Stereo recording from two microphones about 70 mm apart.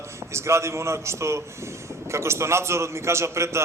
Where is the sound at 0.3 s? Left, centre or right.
Right.